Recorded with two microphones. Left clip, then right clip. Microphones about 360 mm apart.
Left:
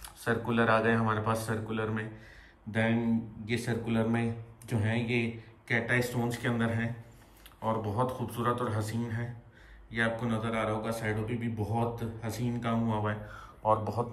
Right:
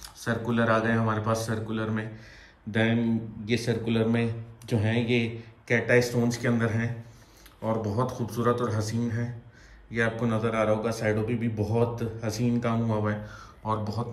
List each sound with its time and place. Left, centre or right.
0.0 s speech: centre